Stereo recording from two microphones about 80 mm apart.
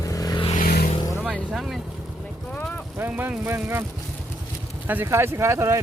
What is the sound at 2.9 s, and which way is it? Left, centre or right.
Speech, right.